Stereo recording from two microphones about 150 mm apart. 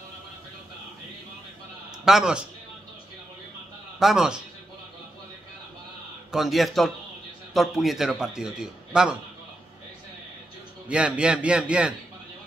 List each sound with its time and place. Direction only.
2.0 s a man's voice: 5° right (ahead or behind)
4.0 s a man's voice: 5° right (ahead or behind)
6.3 s a man's voice: centre (ahead or behind)
10.9 s a man's voice: 5° right (ahead or behind)